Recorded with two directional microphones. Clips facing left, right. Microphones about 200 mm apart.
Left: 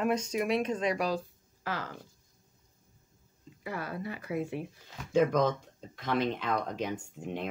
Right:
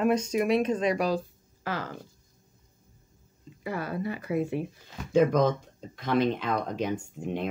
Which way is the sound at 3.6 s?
30° right (ahead or behind).